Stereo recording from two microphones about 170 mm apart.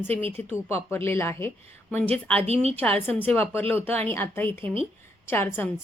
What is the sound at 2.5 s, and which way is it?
Speech, 35° right (ahead or behind).